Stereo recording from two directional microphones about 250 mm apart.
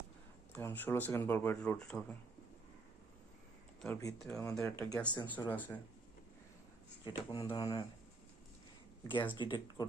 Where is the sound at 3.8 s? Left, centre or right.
Centre.